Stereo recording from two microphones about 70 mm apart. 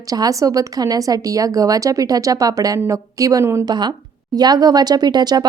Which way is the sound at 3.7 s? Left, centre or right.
Right.